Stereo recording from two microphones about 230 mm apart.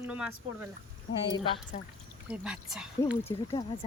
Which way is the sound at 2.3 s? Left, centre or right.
Centre.